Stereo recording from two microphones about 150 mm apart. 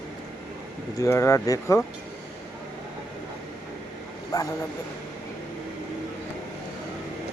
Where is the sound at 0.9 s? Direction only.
20° left (ahead or behind).